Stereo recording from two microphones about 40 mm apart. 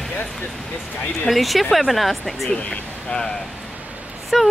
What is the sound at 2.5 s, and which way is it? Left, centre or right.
Speech, left.